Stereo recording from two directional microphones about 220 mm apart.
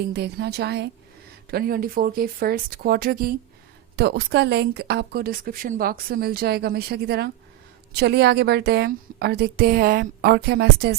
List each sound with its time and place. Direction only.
0.1 s a woman's voice: 50° right (ahead or behind)